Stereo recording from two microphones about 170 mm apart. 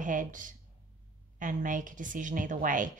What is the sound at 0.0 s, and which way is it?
Speech, 50° right (ahead or behind).